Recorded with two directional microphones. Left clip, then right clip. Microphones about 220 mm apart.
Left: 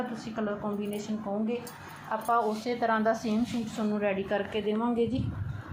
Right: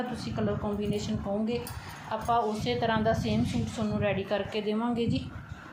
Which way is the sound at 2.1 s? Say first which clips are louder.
Even; centre (ahead or behind).